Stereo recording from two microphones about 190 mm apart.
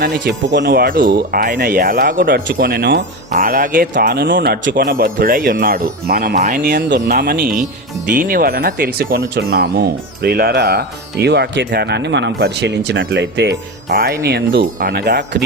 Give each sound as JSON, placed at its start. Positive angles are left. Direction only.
{"t": 0.0, "sound": "speech", "side_deg": -65}
{"t": 2.2, "sound": "speech", "side_deg": -60}
{"t": 3.4, "sound": "speech", "side_deg": -45}